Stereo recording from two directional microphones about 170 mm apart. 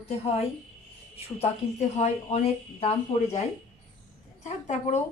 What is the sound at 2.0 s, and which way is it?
A woman's voice, 40° left (ahead or behind).